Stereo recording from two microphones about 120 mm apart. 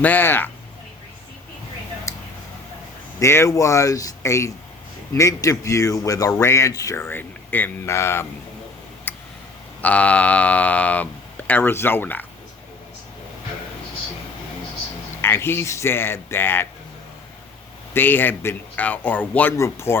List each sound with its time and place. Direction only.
0.0 s speech: 15° left (ahead or behind)
2.1 s a sound: 25° left (ahead or behind)
3.2 s a man's voice: 25° left (ahead or behind)
9.1 s tick: 15° left (ahead or behind)
9.8 s speech: 10° left (ahead or behind)
15.2 s a man's voice: 20° left (ahead or behind)
17.9 s speech: 15° left (ahead or behind)
19.5 s a man's voice: 25° left (ahead or behind)